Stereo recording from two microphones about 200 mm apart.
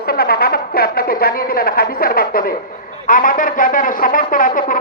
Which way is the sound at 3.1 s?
45° left (ahead or behind).